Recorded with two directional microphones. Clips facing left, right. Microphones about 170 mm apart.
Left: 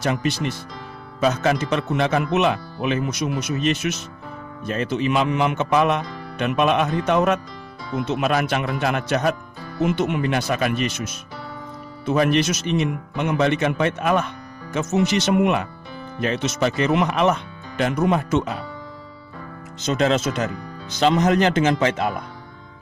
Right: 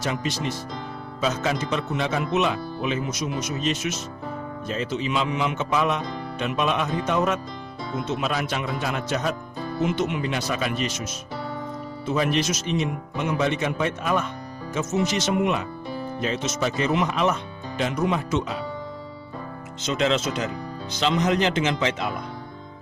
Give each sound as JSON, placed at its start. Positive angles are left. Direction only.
{"t": 0.0, "sound": "speech", "side_deg": 60}
{"t": 19.8, "sound": "speech", "side_deg": 45}